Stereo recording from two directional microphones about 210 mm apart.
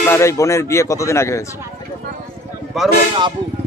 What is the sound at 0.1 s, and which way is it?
Speech, 15° left (ahead or behind).